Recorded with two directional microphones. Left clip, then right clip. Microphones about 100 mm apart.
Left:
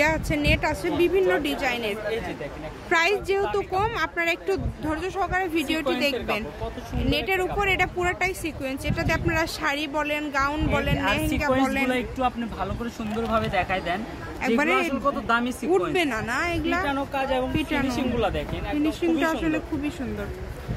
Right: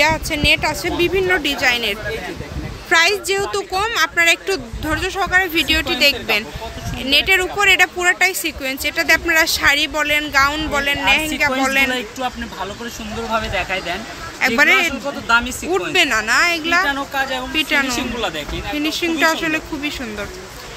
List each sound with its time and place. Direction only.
0.0 s speech: 10° left (ahead or behind); by 2.0 s 15° right (ahead or behind)
2.9 s speech: 5° left (ahead or behind)
4.8 s speech: 10° right (ahead or behind)
11.9 s speech: 15° left (ahead or behind)
14.4 s speech: 10° right (ahead or behind)
15.2 s speech: 45° left (ahead or behind)
15.9 s speech: 10° right (ahead or behind)
16.8 s speech: 30° left (ahead or behind)
17.6 s speech: 5° right (ahead or behind)